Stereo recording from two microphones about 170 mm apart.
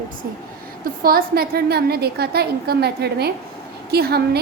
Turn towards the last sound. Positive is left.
turn(degrees=-65)  # may be behind; listen again after turning